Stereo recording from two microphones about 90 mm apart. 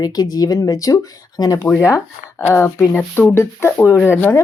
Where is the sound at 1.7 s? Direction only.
30° left (ahead or behind).